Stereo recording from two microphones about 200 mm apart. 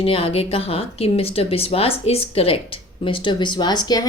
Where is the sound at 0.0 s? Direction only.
30° left (ahead or behind).